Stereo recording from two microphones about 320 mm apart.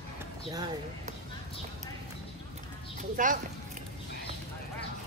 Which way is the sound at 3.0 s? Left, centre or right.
Right.